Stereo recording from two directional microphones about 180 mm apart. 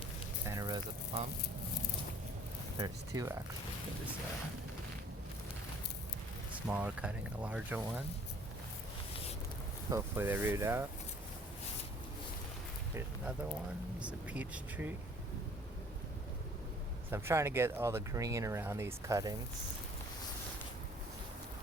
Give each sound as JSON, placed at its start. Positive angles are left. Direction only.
{"t": 0.4, "sound": "a sound", "side_deg": -20}
{"t": 2.7, "sound": "speech", "side_deg": -20}
{"t": 6.7, "sound": "speech", "side_deg": -10}
{"t": 9.9, "sound": "speech", "side_deg": -10}
{"t": 14.0, "sound": "speech", "side_deg": -5}
{"t": 17.1, "sound": "speech", "side_deg": -15}